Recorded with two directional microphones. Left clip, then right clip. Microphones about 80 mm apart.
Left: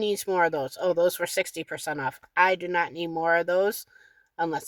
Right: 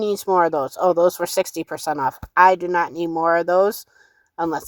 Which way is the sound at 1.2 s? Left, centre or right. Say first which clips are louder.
Right 6 dB; right.